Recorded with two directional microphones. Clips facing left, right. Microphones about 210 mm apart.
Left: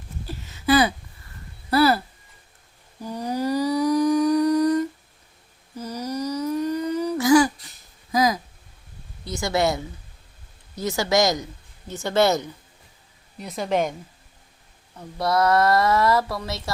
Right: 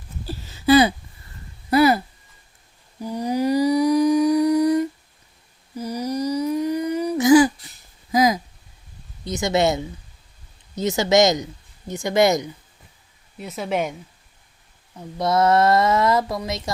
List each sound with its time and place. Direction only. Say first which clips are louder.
0.3 s a sound: right 4 dB; 30° right (ahead or behind)
3.0 s humming: right 4 dB; 10° right (ahead or behind)
8.1 s a sound: right 3 dB; 20° right (ahead or behind)
9.2 s a woman's voice: right 3 dB; 20° right (ahead or behind)
13.4 s speech: left 1 dB; 5° right (ahead or behind)
15.2 s speech: right 2 dB; 25° right (ahead or behind)